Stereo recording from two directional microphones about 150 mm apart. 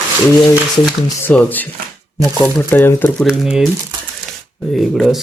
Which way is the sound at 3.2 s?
5° right (ahead or behind).